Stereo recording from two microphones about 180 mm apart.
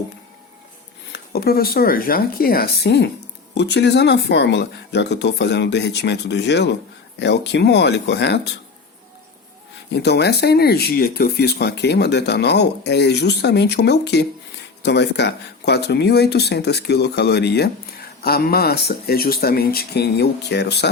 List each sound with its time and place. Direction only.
1.1 s speech: 60° left (ahead or behind)
9.9 s speech: 70° left (ahead or behind)